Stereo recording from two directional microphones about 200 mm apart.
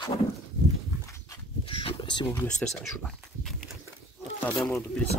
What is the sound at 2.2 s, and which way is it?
Speech, 5° left (ahead or behind).